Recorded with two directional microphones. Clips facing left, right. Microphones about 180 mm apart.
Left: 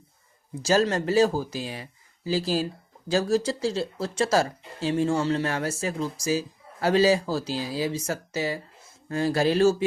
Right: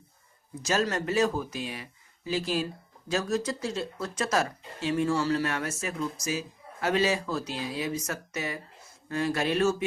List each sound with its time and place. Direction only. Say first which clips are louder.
0.6 s speech: left 5 dB; 30° left (ahead or behind)